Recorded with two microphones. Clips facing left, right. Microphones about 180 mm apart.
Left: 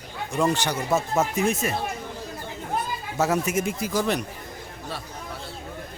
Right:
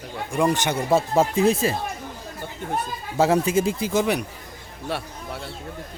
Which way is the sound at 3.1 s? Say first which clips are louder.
Right 5 dB; 30° right (ahead or behind).